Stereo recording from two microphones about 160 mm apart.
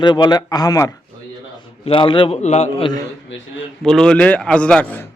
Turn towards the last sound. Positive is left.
turn(degrees=10)  # may be behind; listen again after turning